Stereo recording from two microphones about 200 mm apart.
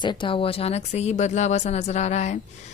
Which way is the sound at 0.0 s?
25° left (ahead or behind).